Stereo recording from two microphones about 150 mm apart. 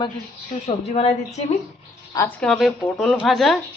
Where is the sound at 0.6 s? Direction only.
45° left (ahead or behind).